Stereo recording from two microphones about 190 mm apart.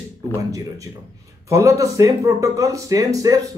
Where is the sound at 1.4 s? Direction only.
15° right (ahead or behind).